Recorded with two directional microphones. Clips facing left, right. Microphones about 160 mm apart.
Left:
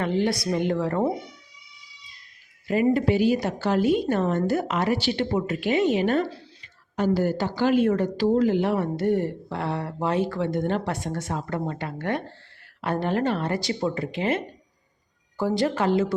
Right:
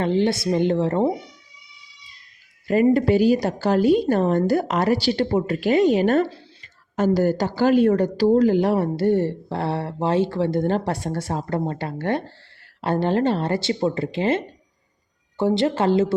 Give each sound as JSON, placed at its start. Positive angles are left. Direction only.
{"t": 0.0, "sound": "speech", "side_deg": -30}
{"t": 2.6, "sound": "a woman's voice", "side_deg": -40}